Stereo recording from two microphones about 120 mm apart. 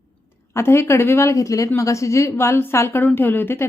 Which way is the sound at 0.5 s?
20° left (ahead or behind).